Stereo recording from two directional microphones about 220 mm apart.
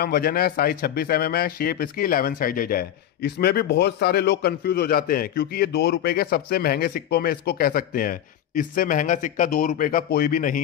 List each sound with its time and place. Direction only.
0.0 s speech: 45° left (ahead or behind)